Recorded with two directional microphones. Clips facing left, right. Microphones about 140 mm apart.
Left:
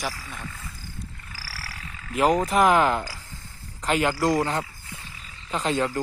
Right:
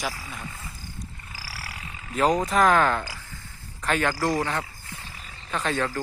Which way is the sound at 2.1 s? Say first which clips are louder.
Left 1 dB; 10° left (ahead or behind).